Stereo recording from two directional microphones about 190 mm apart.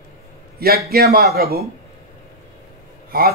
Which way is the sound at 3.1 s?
50° right (ahead or behind).